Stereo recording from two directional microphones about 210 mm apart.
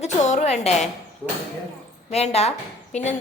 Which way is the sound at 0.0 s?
35° left (ahead or behind).